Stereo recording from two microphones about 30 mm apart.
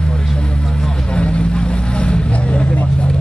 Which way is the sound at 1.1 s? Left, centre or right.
Left.